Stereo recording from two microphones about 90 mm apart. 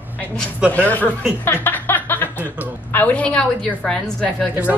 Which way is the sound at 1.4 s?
25° left (ahead or behind).